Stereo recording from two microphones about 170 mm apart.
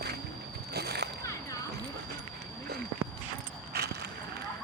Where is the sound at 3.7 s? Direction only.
70° right (ahead or behind).